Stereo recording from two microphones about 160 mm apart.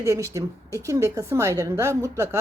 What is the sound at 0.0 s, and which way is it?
A woman's voice, 20° right (ahead or behind).